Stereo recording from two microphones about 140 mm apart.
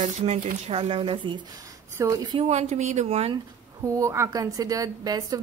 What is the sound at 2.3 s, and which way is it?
Speech, 50° right (ahead or behind).